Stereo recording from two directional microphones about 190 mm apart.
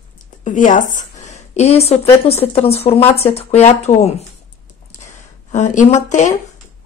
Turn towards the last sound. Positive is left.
turn(degrees=40)  # may be behind; listen again after turning